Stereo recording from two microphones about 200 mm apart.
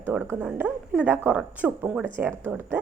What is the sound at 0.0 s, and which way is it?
A woman's voice, 10° right (ahead or behind).